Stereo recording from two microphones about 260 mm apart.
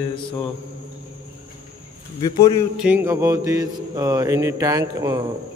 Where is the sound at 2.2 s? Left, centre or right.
Centre.